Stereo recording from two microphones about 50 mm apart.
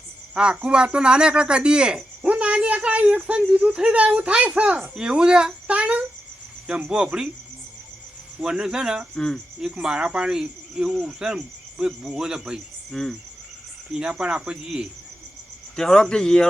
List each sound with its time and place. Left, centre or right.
0.3 s speech: centre
4.9 s speech: centre
6.7 s speech: centre
8.4 s speech: centre
9.1 s speech: centre
9.6 s speech: centre
11.0 s cricket: centre
12.1 s speech: centre
12.9 s speech: centre
14.0 s speech: right
15.7 s speech: centre